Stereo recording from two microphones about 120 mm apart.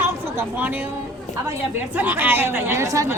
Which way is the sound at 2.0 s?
15° right (ahead or behind).